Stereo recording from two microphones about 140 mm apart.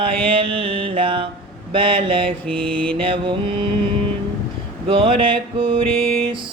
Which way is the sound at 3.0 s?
40° right (ahead or behind).